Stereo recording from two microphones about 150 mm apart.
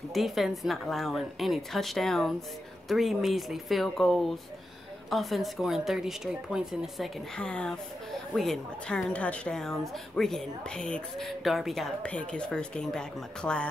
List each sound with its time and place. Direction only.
0.1 s a woman's voice: centre (ahead or behind)
7.3 s a woman's voice: 5° left (ahead or behind)